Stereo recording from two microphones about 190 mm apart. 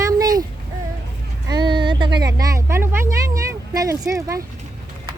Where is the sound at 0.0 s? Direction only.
20° right (ahead or behind).